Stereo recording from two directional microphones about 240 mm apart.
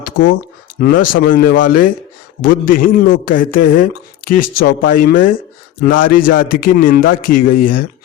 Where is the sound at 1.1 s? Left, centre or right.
Left.